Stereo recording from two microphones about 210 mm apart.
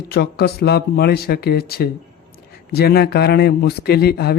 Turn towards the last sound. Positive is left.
turn(degrees=50)  # may be behind; listen again after turning